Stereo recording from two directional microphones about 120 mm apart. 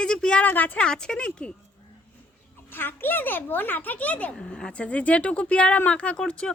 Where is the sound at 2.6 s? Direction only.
15° left (ahead or behind).